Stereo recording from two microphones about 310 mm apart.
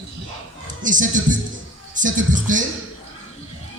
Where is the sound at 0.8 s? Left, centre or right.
Right.